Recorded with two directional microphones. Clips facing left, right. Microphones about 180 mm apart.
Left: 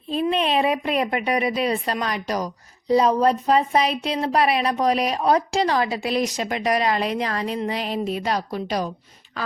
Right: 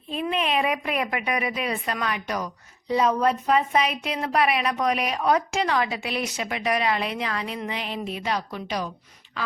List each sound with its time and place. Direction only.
0.1 s a woman's voice: 35° left (ahead or behind)